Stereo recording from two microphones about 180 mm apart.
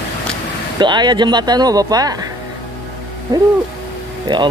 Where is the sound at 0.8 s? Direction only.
25° right (ahead or behind).